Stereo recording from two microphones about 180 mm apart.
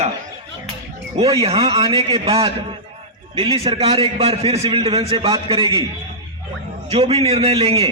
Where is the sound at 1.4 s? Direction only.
35° right (ahead or behind).